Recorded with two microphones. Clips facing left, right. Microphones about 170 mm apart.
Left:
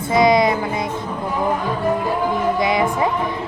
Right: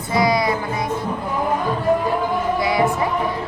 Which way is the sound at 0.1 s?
20° left (ahead or behind).